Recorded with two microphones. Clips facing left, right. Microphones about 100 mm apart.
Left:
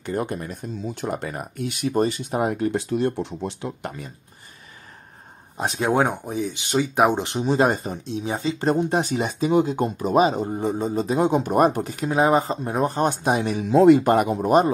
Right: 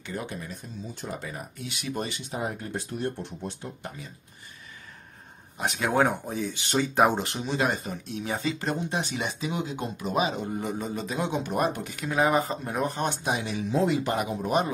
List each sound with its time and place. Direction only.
0.0 s speech: 50° left (ahead or behind)
2.3 s speech: 70° left (ahead or behind)
5.6 s speech: 30° left (ahead or behind)
6.0 s speech: 20° left (ahead or behind)
7.4 s speech: 40° left (ahead or behind)
8.7 s speech: 45° left (ahead or behind)
13.7 s speech: 65° left (ahead or behind); by 14.7 s 45° left (ahead or behind)